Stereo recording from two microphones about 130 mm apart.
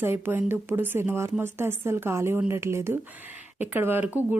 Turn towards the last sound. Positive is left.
turn(degrees=-15)  # may be behind; listen again after turning